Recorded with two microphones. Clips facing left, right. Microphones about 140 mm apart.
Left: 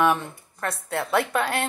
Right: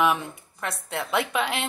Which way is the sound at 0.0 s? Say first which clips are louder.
Left 2 dB; 5° right (ahead or behind).